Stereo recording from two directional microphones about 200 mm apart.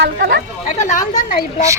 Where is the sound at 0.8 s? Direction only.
35° left (ahead or behind).